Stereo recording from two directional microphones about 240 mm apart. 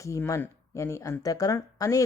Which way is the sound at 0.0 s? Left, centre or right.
Centre.